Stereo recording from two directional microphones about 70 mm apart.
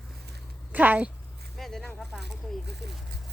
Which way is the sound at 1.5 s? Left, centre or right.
Centre.